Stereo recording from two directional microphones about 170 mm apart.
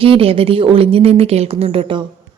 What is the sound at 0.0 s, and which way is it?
A woman's voice, 35° right (ahead or behind).